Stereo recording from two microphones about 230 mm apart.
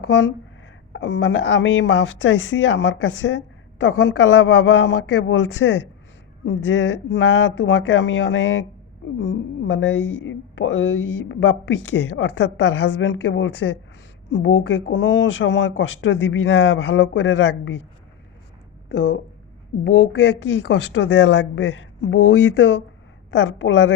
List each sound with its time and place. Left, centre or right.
0.1 s speech: left
18.9 s speech: left